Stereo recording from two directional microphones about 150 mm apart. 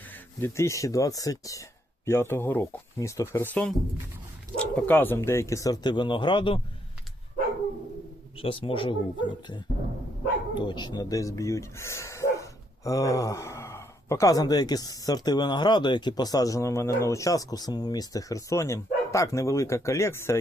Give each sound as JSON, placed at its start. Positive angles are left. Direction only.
{"t": 0.4, "sound": "speech", "side_deg": 20}
{"t": 8.4, "sound": "speech", "side_deg": 35}